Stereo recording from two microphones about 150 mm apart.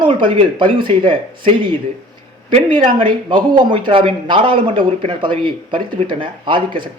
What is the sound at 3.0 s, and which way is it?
A man's voice, 30° right (ahead or behind).